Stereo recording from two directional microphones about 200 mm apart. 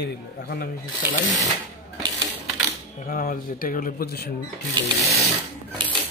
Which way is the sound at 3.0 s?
45° left (ahead or behind).